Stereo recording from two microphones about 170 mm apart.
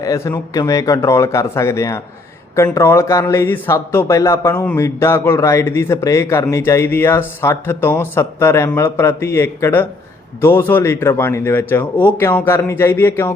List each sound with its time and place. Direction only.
0.0 s speech: 20° left (ahead or behind)